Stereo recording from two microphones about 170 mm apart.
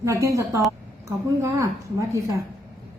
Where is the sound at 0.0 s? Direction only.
15° right (ahead or behind).